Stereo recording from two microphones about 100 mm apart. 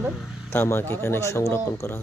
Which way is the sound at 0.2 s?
5° right (ahead or behind).